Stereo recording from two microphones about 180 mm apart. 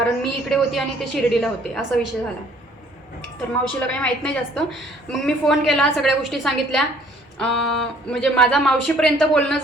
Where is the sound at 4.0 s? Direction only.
5° left (ahead or behind).